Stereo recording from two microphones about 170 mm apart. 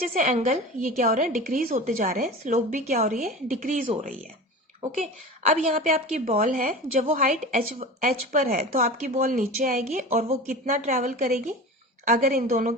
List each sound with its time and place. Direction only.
0.2 s a woman's voice: 50° right (ahead or behind)
5.5 s a woman's voice: 55° right (ahead or behind)
7.0 s a woman's voice: 35° right (ahead or behind)
7.3 s a woman's voice: 55° right (ahead or behind)